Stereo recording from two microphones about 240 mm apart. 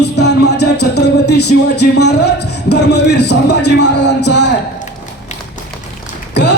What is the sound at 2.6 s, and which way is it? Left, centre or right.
A man's voice, left.